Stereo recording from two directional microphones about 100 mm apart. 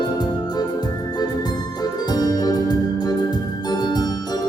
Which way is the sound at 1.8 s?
40° left (ahead or behind).